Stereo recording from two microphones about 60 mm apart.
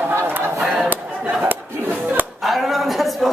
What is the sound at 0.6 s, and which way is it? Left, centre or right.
Speech, centre.